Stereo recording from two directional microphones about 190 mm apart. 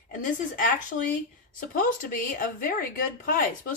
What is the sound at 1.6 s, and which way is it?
Speech, 45° left (ahead or behind).